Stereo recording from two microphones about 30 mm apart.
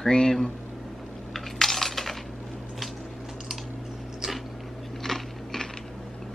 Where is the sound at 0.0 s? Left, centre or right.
Centre.